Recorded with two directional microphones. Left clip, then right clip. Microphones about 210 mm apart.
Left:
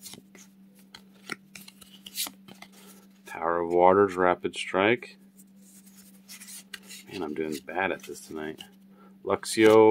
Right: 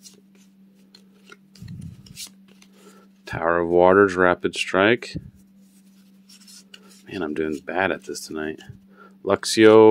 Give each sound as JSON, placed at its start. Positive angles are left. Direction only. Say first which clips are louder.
{"t": 0.9, "sound": "shuffling cards", "louder": "left 8 dB", "side_deg": 25}
{"t": 3.3, "sound": "speech", "louder": "right 6 dB", "side_deg": -25}
{"t": 7.1, "sound": "speech", "louder": "right 6 dB", "side_deg": -25}